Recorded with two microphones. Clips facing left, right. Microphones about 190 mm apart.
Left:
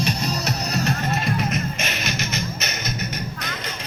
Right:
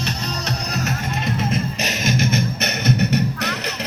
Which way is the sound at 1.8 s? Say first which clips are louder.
Right 6 dB; 45° right (ahead or behind).